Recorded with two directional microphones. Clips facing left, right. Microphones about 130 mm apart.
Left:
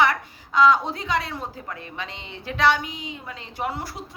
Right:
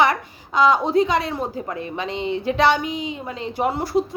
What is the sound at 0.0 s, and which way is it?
A woman's voice, 15° right (ahead or behind).